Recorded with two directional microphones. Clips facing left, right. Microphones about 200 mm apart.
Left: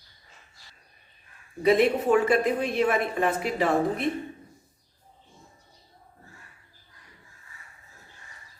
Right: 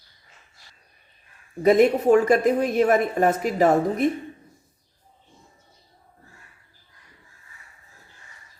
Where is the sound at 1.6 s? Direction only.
45° right (ahead or behind).